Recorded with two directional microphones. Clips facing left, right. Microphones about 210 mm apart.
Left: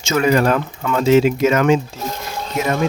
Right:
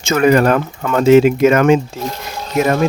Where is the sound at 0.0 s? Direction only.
55° right (ahead or behind).